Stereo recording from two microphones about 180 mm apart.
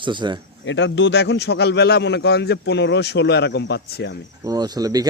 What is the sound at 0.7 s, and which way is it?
A man's voice, 90° left.